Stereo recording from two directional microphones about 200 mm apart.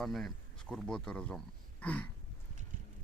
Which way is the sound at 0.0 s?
Centre (ahead or behind).